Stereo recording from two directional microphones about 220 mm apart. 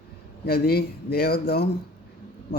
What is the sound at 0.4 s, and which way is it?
A man's voice, 45° left (ahead or behind).